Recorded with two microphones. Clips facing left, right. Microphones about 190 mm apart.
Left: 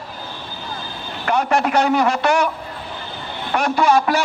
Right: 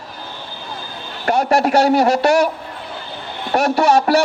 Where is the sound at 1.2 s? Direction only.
40° right (ahead or behind).